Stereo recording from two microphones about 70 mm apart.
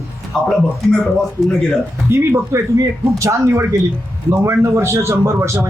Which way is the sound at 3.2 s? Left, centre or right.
Right.